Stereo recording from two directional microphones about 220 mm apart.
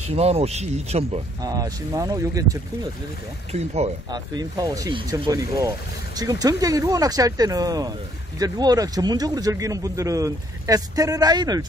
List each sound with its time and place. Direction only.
0.1 s speech: 30° right (ahead or behind)
1.4 s speech: 15° right (ahead or behind)
3.5 s speech: 30° right (ahead or behind)
4.1 s speech: 15° right (ahead or behind)